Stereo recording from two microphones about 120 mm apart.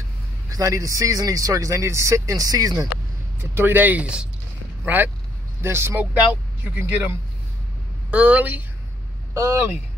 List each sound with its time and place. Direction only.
0.5 s speech: 30° right (ahead or behind)
3.3 s speech: 20° right (ahead or behind)
8.1 s speech: 10° right (ahead or behind)
9.3 s speech: 25° right (ahead or behind)